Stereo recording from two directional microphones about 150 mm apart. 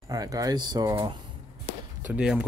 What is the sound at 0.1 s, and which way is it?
Speech, 25° right (ahead or behind).